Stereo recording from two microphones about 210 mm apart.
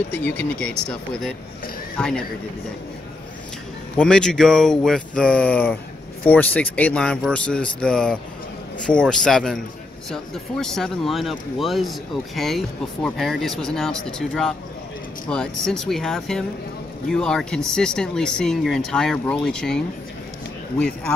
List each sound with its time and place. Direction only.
0.1 s speech: 10° left (ahead or behind)
3.9 s speech: 5° left (ahead or behind)